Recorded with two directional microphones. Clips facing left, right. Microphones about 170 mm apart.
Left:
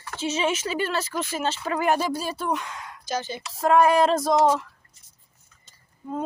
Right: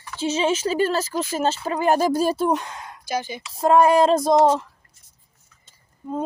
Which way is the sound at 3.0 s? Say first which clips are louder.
Right 2 dB; 10° right (ahead or behind).